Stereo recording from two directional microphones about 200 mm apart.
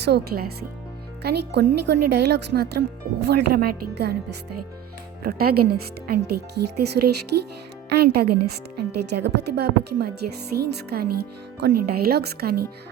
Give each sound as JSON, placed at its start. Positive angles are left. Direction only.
{"t": 0.0, "sound": "speech", "side_deg": -55}
{"t": 5.2, "sound": "speech", "side_deg": -50}